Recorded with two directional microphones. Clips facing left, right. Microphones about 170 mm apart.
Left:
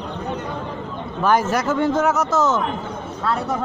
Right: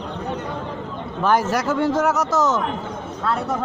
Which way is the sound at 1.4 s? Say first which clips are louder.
Left 1 dB; 20° left (ahead or behind).